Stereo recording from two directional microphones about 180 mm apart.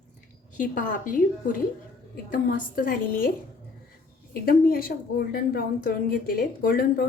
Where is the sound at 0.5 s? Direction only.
45° left (ahead or behind).